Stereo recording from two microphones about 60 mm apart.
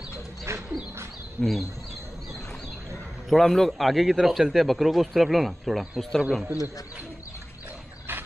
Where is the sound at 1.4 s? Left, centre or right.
Centre.